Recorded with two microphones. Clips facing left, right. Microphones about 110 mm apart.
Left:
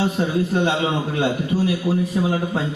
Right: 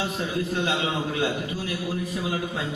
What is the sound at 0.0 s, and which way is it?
A man's voice, 35° left (ahead or behind).